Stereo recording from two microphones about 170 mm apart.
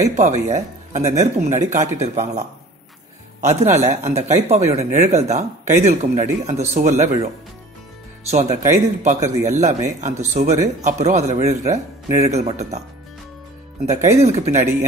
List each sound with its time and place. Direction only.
0.0 s speech: 45° right (ahead or behind)
3.4 s speech: 40° right (ahead or behind)
8.3 s speech: 40° right (ahead or behind)
13.8 s speech: 40° right (ahead or behind)